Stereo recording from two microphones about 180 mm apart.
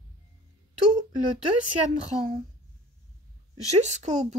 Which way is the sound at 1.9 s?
35° right (ahead or behind).